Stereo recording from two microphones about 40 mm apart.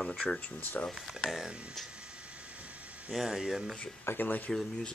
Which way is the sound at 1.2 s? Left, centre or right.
Centre.